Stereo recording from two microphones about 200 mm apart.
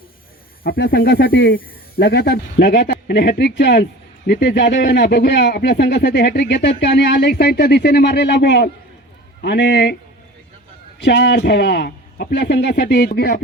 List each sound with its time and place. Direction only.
0.6 s speech: 50° left (ahead or behind)
11.0 s speech: 60° left (ahead or behind)